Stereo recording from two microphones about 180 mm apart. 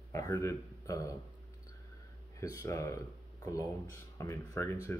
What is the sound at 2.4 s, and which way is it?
Speech, 15° left (ahead or behind).